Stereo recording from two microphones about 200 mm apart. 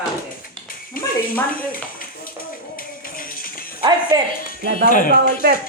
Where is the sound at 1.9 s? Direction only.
45° left (ahead or behind).